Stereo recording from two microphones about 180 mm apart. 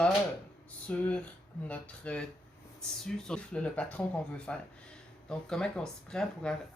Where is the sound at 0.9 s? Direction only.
5° left (ahead or behind).